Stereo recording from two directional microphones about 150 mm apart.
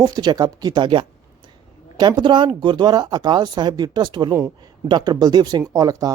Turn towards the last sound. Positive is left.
turn(degrees=-25)  # may be behind; listen again after turning